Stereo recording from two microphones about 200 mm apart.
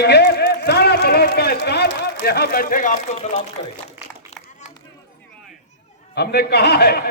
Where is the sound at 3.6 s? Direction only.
25° left (ahead or behind).